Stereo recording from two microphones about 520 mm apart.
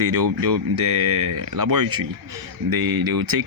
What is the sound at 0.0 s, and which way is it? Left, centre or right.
Speech, right.